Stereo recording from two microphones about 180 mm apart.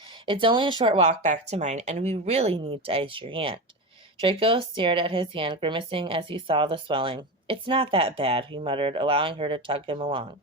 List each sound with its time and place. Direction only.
0.3 s speech: 25° right (ahead or behind)
1.0 s speech: 40° right (ahead or behind)